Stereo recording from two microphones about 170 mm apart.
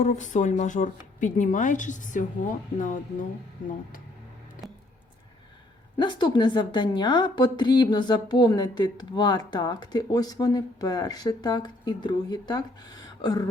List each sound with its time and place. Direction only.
0.0 s speech: 45° left (ahead or behind)
6.0 s a woman's voice: 25° left (ahead or behind)